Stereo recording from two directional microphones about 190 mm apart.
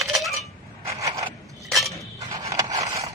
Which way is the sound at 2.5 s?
15° right (ahead or behind).